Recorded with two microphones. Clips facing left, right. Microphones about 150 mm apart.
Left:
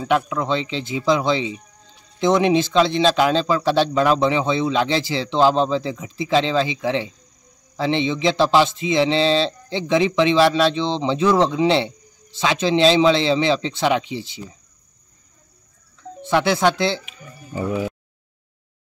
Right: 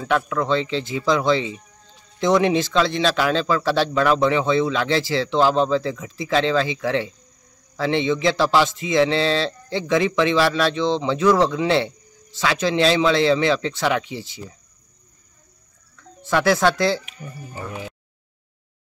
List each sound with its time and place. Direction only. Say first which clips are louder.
0.0 s speech: left 1 dB; 15° left (ahead or behind)
16.2 s speech: even; 20° left (ahead or behind)